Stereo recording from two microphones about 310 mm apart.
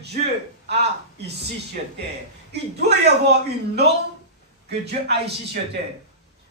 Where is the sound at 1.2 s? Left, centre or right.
Right.